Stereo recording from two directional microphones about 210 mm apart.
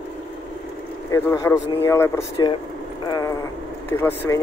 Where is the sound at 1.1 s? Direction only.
15° left (ahead or behind).